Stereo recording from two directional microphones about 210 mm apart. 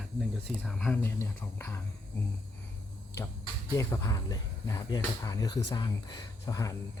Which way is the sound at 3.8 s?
15° left (ahead or behind).